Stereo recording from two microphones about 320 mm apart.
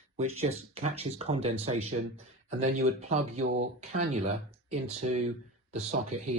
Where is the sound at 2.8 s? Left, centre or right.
Right.